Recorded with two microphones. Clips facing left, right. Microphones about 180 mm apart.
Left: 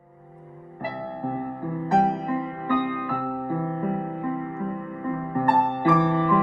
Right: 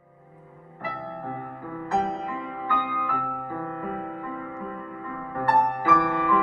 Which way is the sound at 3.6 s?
20° left (ahead or behind).